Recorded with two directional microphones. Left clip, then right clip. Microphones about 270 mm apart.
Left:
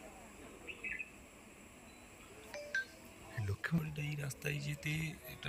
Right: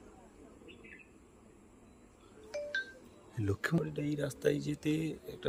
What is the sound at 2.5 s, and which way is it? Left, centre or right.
Music, right.